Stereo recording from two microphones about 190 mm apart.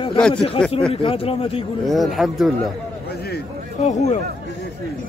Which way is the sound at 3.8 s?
40° left (ahead or behind).